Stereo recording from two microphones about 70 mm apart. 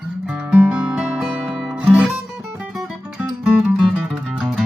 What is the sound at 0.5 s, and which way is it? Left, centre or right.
Music, centre.